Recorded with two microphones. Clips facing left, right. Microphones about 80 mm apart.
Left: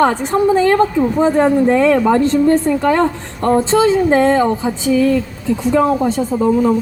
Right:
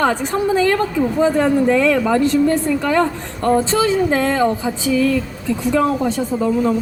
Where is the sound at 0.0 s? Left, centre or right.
Left.